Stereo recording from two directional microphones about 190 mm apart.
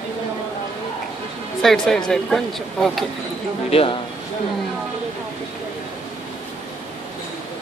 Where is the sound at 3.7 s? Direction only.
30° left (ahead or behind).